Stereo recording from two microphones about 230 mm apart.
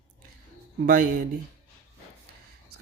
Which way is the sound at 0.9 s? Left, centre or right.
Right.